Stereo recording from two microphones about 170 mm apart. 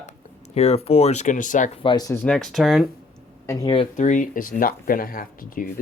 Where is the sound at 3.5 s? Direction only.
20° left (ahead or behind).